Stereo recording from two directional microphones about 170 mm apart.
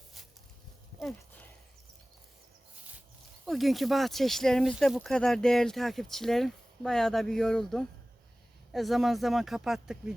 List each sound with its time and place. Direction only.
3.4 s speech: centre (ahead or behind)